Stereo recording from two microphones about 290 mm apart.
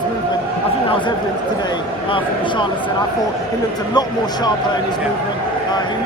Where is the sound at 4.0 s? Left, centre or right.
Centre.